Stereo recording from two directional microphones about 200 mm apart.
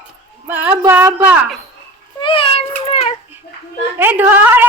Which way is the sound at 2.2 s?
25° left (ahead or behind).